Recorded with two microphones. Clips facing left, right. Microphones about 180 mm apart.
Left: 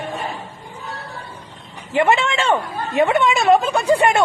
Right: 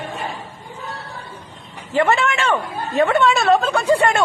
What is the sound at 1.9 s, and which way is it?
Speech, 20° left (ahead or behind).